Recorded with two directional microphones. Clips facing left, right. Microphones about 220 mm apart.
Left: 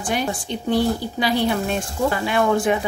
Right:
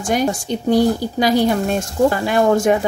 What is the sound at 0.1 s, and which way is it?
A woman's voice, 40° right (ahead or behind).